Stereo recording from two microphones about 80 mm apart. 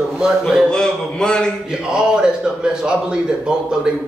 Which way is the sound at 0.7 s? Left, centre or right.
Centre.